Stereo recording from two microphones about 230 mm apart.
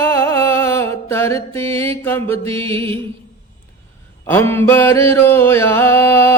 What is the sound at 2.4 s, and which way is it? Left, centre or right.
Music, right.